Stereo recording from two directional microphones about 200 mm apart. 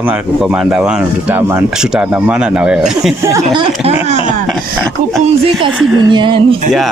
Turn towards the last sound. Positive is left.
turn(degrees=-25)  # may be behind; listen again after turning